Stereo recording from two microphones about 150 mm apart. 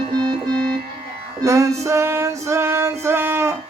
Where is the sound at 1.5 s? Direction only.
20° right (ahead or behind).